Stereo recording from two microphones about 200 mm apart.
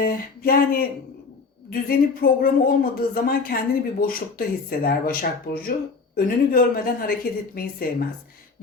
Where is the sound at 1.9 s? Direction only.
45° left (ahead or behind).